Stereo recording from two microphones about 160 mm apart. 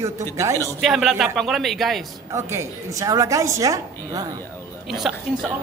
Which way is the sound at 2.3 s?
15° right (ahead or behind).